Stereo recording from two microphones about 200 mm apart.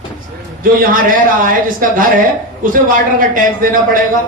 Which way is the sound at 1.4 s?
45° right (ahead or behind).